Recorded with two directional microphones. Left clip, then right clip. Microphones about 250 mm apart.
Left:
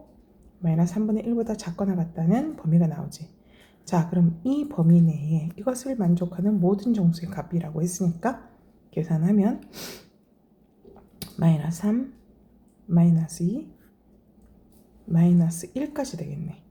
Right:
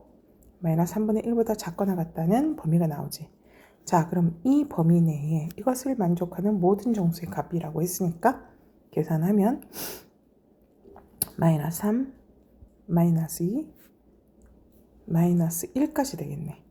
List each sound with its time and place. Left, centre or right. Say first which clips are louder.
0.6 s speech: right 1 dB; right
10.9 s a sound: right 2 dB; right
12.9 s speech: left 1 dB; right
15.1 s speech: left 1 dB; right